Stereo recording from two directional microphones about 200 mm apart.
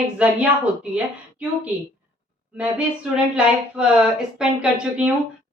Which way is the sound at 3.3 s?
5° right (ahead or behind).